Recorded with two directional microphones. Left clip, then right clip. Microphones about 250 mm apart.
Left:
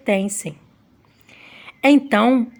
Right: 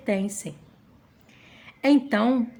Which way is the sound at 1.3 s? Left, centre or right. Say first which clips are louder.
Left 8 dB; left.